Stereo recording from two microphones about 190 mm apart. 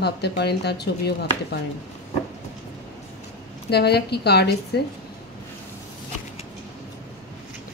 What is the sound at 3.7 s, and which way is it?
Speech, 60° left (ahead or behind).